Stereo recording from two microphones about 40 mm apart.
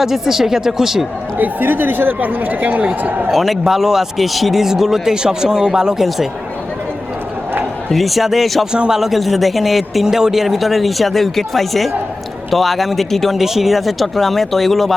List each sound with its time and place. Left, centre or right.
0.0 s speech: centre
1.4 s speech: right
3.3 s speech: centre
6.0 s a man's voice: centre
7.9 s a man's voice: centre
13.3 s a man's voice: centre